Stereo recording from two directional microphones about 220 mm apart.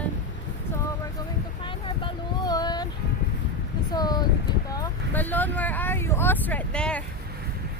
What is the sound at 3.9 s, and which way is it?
Speech, 20° left (ahead or behind).